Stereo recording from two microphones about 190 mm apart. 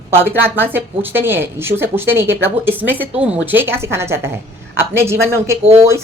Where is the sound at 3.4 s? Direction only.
10° right (ahead or behind).